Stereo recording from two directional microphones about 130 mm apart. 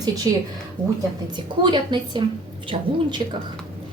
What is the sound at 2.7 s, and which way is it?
Speech, 55° right (ahead or behind).